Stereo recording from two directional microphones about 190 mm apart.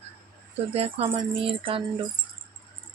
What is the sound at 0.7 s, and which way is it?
Speech, 30° right (ahead or behind).